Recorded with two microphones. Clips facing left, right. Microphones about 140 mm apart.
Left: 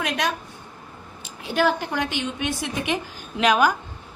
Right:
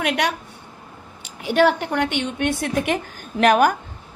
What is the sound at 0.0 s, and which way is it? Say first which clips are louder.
A woman's voice: right 3 dB; 75° right (ahead or behind).